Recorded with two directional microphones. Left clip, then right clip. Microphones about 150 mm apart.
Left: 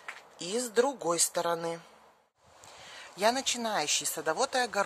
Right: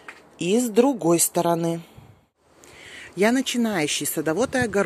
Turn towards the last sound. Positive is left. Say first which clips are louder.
# right 6 dB
turn(degrees=-10)  # may be behind; listen again after turning